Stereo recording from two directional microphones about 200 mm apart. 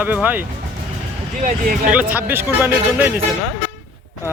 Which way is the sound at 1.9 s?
10° right (ahead or behind).